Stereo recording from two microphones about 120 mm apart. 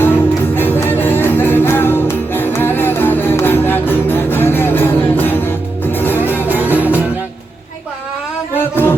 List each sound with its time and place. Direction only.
0.0 s music: 15° left (ahead or behind)
6.7 s music: 15° right (ahead or behind)
8.7 s a sound: 15° left (ahead or behind)